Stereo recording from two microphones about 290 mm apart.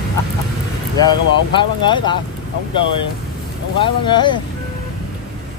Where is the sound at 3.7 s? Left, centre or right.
Centre.